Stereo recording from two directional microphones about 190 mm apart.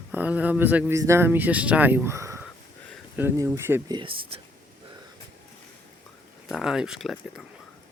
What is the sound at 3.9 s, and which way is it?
Speech, 25° right (ahead or behind).